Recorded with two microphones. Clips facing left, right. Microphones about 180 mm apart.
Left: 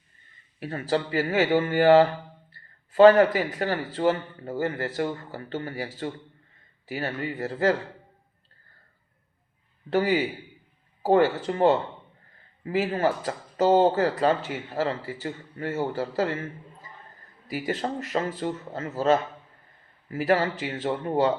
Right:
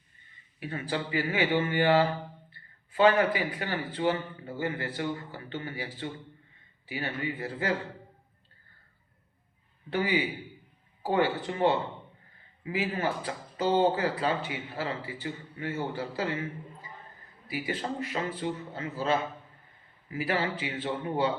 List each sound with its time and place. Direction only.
0.6 s speech: 40° left (ahead or behind)
2.5 s a sound: 40° left (ahead or behind)
3.3 s speech: 40° left (ahead or behind)
9.9 s speech: 45° left (ahead or behind)
17.5 s speech: 45° left (ahead or behind)